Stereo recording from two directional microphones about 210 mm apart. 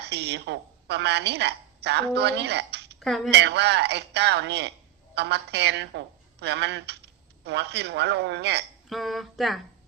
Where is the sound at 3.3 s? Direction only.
55° right (ahead or behind).